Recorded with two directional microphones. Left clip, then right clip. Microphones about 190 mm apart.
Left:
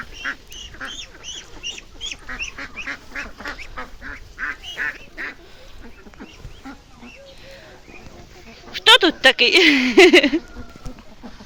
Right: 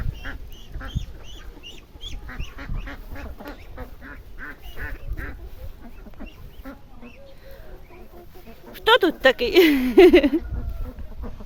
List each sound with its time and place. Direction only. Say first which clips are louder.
0.8 s duck: left 6 dB; 25° right (ahead or behind)
2.2 s duck: left 9 dB; 15° right (ahead or behind)
4.8 s duck: left 9 dB; 35° right (ahead or behind)
8.7 s speech: left 5 dB; 5° right (ahead or behind)